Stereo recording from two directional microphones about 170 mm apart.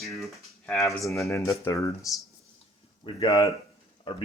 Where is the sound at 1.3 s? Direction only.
15° left (ahead or behind).